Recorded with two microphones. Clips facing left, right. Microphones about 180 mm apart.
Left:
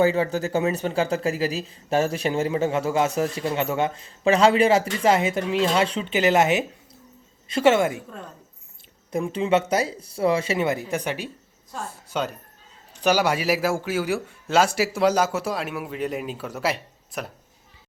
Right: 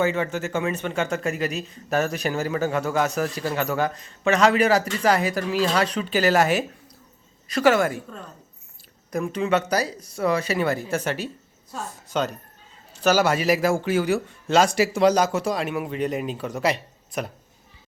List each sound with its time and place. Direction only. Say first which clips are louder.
0.0 s a man's voice: left 3 dB; 35° left (ahead or behind)
9.1 s a man's voice: left 1 dB; 30° left (ahead or behind); by 17.3 s 5° left (ahead or behind)